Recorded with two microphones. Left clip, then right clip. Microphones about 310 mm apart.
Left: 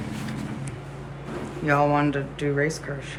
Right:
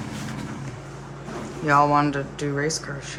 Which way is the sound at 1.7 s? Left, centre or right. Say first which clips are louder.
Right 3 dB; centre.